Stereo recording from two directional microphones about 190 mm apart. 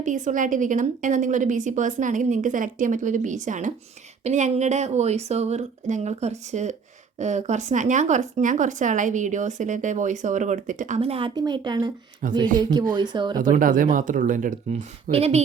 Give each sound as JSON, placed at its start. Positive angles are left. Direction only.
{"t": 0.0, "sound": "speech", "side_deg": -40}
{"t": 12.2, "sound": "speech", "side_deg": -45}
{"t": 12.9, "sound": "speech", "side_deg": -25}
{"t": 13.3, "sound": "speech", "side_deg": -45}